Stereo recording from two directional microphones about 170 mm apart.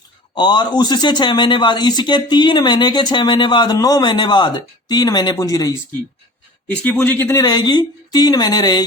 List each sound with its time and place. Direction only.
0.3 s speech: 25° left (ahead or behind)
6.7 s speech: 10° left (ahead or behind); by 8.9 s 25° left (ahead or behind)